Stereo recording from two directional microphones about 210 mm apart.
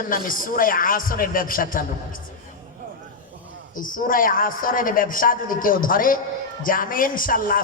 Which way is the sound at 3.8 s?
40° left (ahead or behind).